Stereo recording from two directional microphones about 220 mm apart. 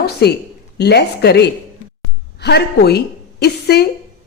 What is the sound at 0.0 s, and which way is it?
A woman's voice, 45° left (ahead or behind).